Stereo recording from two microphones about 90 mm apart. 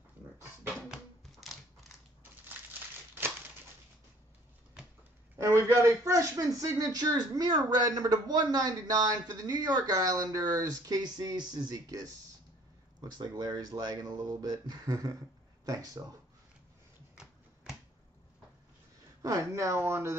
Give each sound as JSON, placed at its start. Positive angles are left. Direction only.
{"t": 0.8, "sound": "a sound", "side_deg": -5}
{"t": 5.4, "sound": "a man's voice", "side_deg": -30}
{"t": 19.2, "sound": "speech", "side_deg": -40}